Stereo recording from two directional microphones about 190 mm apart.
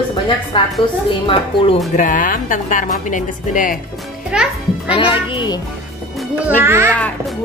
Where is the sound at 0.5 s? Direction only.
25° left (ahead or behind).